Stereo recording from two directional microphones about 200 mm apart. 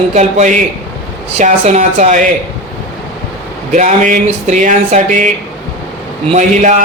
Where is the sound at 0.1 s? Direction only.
35° right (ahead or behind).